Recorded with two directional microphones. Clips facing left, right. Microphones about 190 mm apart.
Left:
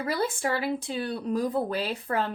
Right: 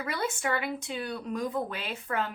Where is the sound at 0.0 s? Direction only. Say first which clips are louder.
Left 4 dB; 35° left (ahead or behind).